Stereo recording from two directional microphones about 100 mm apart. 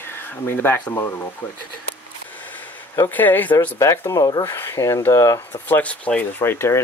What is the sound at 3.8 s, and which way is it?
Speech, 35° left (ahead or behind).